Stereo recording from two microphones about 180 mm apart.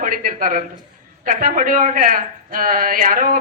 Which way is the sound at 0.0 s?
50° right (ahead or behind).